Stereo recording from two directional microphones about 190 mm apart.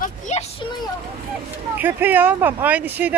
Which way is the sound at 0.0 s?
40° left (ahead or behind).